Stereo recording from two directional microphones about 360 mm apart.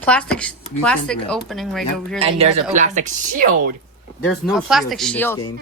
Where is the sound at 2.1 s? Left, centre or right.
Centre.